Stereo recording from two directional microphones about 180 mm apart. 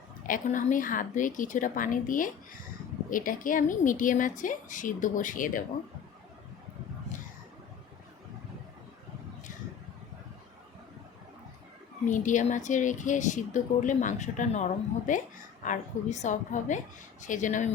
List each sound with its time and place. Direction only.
0.3 s a woman's voice: 45° left (ahead or behind)
12.0 s a woman's voice: 45° left (ahead or behind)